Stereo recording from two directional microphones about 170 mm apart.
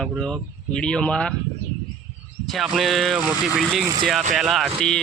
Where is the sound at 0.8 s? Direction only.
5° left (ahead or behind).